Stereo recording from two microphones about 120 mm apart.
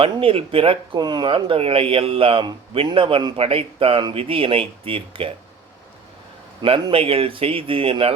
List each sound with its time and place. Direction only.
0.0 s speech: 50° right (ahead or behind)
0.9 s speech: 35° right (ahead or behind)
6.6 s speech: 40° right (ahead or behind)